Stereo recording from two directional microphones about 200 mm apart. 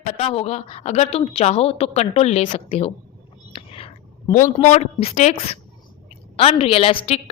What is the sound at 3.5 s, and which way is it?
Whispering, 25° left (ahead or behind).